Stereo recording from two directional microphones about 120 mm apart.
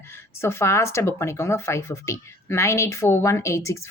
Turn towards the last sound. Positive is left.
turn(degrees=25)  # may be behind; listen again after turning